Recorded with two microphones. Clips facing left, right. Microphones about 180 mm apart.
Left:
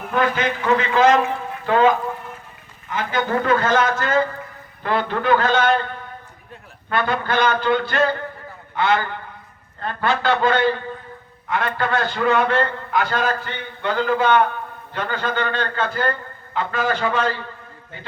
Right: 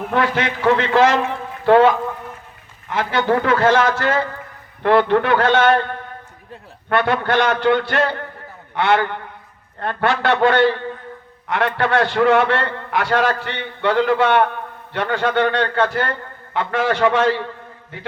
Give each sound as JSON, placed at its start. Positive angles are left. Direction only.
{"t": 0.1, "sound": "a man's voice", "side_deg": -80}
{"t": 2.9, "sound": "a man's voice", "side_deg": -85}
{"t": 4.8, "sound": "a man's voice", "side_deg": -65}